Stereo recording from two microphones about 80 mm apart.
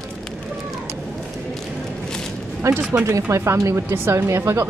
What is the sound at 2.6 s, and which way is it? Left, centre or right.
Speech, right.